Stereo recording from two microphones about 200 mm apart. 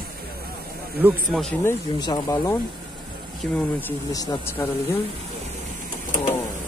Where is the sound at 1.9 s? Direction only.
20° left (ahead or behind).